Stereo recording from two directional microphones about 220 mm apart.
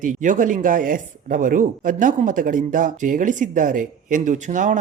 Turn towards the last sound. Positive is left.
turn(degrees=-35)  # may be behind; listen again after turning